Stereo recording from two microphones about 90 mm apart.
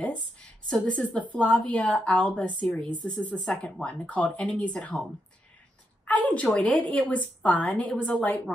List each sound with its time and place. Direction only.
0.0 s a woman's voice: 15° left (ahead or behind)
6.0 s a woman's voice: 15° left (ahead or behind)